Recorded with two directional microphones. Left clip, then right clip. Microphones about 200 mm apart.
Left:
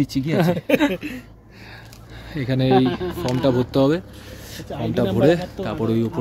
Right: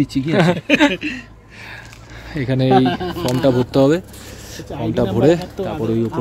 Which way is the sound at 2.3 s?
5° right (ahead or behind).